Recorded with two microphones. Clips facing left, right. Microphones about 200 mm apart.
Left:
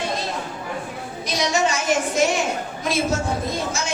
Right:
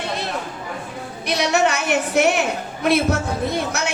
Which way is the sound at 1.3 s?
65° right (ahead or behind).